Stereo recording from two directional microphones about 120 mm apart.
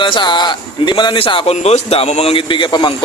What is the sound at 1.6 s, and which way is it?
Speech, 65° left (ahead or behind).